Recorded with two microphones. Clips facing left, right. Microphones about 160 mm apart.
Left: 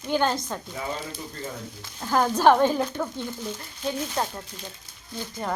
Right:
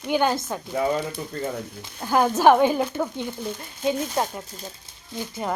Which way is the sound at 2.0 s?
10° right (ahead or behind).